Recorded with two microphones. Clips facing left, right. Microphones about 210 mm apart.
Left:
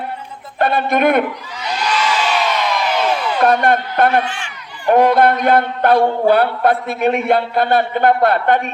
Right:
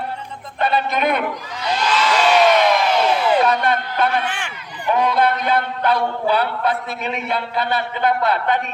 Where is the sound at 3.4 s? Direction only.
50° left (ahead or behind).